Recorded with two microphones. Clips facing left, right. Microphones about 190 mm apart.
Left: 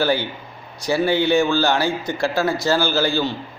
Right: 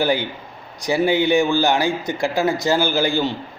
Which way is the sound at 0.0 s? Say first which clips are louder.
Even; 15° right (ahead or behind).